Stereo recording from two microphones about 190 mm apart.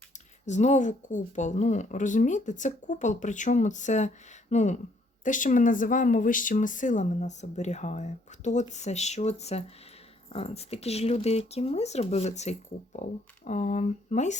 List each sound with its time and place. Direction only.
0.4 s speech: 40° left (ahead or behind)